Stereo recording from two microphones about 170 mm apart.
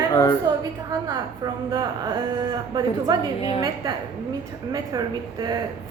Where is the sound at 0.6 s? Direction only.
20° right (ahead or behind).